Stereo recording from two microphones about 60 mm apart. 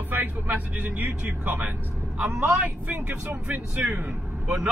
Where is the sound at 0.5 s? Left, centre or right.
Right.